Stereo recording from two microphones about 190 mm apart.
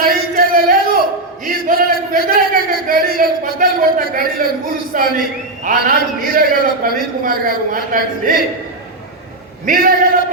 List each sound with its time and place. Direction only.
0.0 s a sound: 50° right (ahead or behind)
4.9 s a man's voice: 50° right (ahead or behind)
9.6 s a man's voice: 50° right (ahead or behind)